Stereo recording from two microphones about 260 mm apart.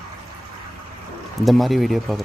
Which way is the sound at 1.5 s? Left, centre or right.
Centre.